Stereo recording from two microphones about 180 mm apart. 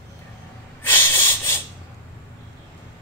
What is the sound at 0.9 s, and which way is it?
Snort, 10° left (ahead or behind).